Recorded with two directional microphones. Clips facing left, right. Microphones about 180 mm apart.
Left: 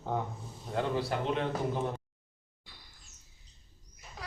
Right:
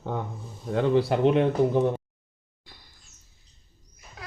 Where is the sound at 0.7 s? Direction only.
65° right (ahead or behind).